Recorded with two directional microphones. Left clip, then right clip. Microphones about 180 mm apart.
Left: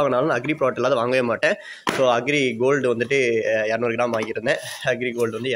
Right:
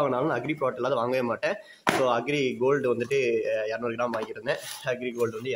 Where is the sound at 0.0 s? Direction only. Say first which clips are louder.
Left 6 dB; 25° left (ahead or behind).